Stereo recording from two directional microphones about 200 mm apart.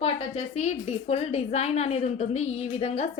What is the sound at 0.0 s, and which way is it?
A woman's voice, 35° left (ahead or behind).